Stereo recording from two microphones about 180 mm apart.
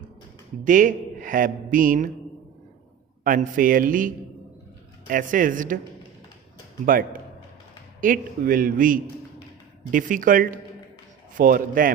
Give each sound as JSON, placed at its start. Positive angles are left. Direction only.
{"t": 0.6, "sound": "a man's voice", "side_deg": -45}
{"t": 3.2, "sound": "a man's voice", "side_deg": -50}
{"t": 6.8, "sound": "a man's voice", "side_deg": -50}